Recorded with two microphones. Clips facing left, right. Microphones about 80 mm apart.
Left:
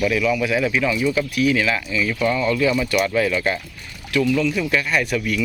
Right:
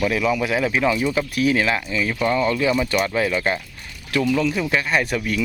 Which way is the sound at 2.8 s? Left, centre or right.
Right.